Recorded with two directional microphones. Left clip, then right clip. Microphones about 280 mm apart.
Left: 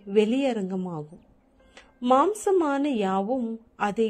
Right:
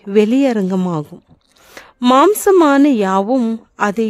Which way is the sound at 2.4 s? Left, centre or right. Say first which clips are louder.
Right 13 dB; right.